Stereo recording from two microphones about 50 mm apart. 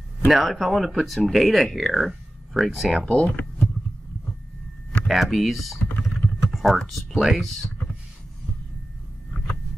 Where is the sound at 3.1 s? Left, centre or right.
Left.